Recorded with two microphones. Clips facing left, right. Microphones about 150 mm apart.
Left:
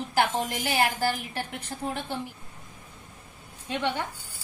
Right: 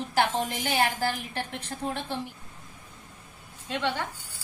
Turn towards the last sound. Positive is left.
turn(degrees=15)  # may be behind; listen again after turning